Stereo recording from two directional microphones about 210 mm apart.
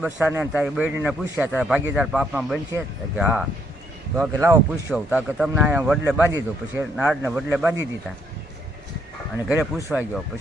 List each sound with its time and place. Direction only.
0.0 s a man's voice: 5° right (ahead or behind)
9.5 s a man's voice: 10° right (ahead or behind)